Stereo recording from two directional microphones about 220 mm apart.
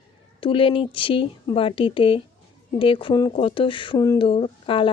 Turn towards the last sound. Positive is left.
turn(degrees=25)  # may be behind; listen again after turning